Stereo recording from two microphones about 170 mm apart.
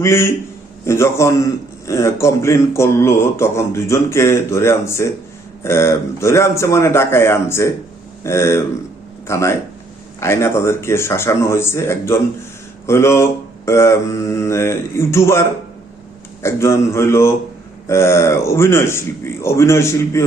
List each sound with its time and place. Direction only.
0.0 s a man's voice: 15° left (ahead or behind)